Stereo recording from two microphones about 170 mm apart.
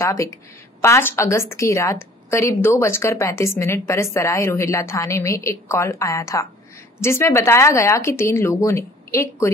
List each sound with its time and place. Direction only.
0.0 s a woman's voice: 15° left (ahead or behind)